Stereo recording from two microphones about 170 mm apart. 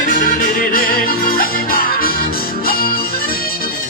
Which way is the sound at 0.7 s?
55° left (ahead or behind).